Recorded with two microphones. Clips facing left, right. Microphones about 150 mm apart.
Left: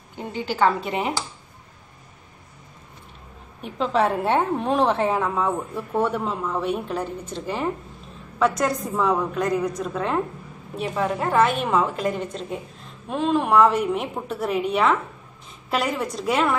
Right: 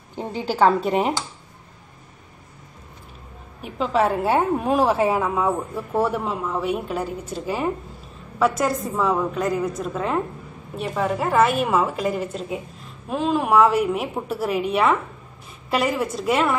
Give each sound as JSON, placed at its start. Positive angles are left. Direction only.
{"t": 0.2, "sound": "speech", "side_deg": -40}
{"t": 3.6, "sound": "a woman's voice", "side_deg": -5}